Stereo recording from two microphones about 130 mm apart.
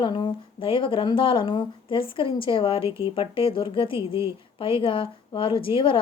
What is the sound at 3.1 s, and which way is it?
Speech, 40° left (ahead or behind).